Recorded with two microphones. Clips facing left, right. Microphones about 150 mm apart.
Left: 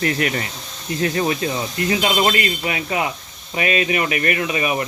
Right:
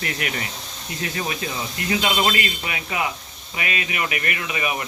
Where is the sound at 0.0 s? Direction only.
40° left (ahead or behind).